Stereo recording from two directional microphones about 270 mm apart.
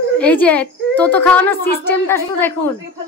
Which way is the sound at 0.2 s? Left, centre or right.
Centre.